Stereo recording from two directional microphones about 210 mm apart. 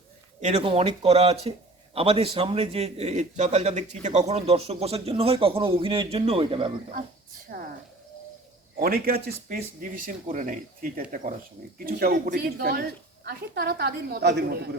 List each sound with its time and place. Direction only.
0.4 s speech: 30° right (ahead or behind)
7.5 s a woman's voice: 45° right (ahead or behind)
8.8 s a woman's voice: 45° right (ahead or behind)